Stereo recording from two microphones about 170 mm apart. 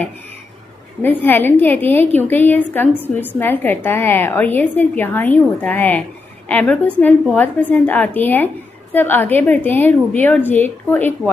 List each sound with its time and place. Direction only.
1.0 s a woman's voice: 10° left (ahead or behind)